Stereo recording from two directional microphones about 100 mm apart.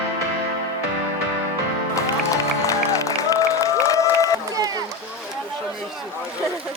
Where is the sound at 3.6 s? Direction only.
35° left (ahead or behind).